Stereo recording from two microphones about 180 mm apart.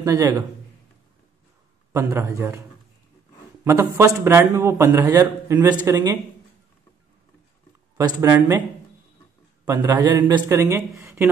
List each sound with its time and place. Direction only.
0.0 s a man's voice: 20° right (ahead or behind)
1.9 s a man's voice: 15° right (ahead or behind)
3.6 s a man's voice: 15° right (ahead or behind)
8.0 s a man's voice: 20° right (ahead or behind)
9.7 s a man's voice: 15° right (ahead or behind)